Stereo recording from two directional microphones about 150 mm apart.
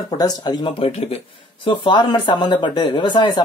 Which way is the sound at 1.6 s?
30° left (ahead or behind).